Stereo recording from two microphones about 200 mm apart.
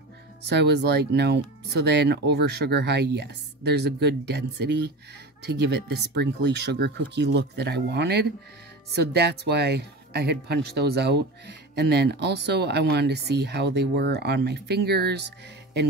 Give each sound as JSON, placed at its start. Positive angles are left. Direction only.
{"t": 0.5, "sound": "speech", "side_deg": -55}